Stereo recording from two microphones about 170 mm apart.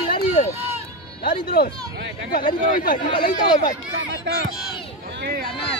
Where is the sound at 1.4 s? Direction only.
60° left (ahead or behind).